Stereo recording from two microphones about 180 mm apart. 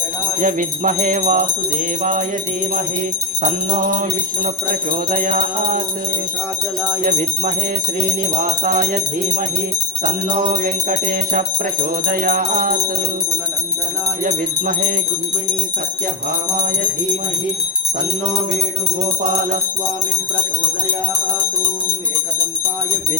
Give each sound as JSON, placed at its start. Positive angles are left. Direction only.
{"t": 0.3, "sound": "jingle bell", "side_deg": -45}
{"t": 4.7, "sound": "jingle bell", "side_deg": -50}
{"t": 7.0, "sound": "jingle bell", "side_deg": -45}
{"t": 8.6, "sound": "jingle bell", "side_deg": -50}
{"t": 14.3, "sound": "jingle bell", "side_deg": -45}